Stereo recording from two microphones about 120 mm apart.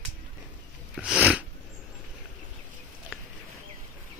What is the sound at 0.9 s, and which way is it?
Sneeze, 5° right (ahead or behind).